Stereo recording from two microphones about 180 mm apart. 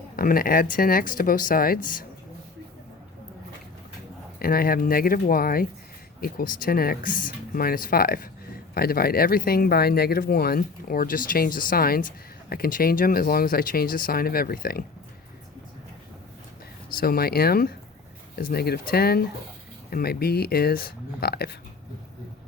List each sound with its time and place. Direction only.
0.2 s speech: 50° left (ahead or behind)
4.4 s speech: 55° left (ahead or behind)
17.0 s speech: 55° left (ahead or behind)